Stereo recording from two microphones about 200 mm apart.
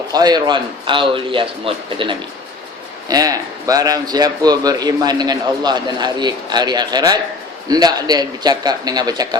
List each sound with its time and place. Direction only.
0.1 s speech: 20° right (ahead or behind)